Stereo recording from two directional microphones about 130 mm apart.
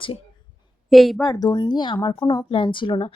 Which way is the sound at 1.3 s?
35° left (ahead or behind).